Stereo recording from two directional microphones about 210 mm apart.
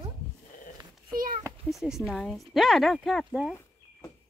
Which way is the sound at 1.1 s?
40° right (ahead or behind).